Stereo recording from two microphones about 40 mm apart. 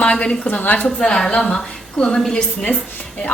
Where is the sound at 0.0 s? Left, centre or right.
Left.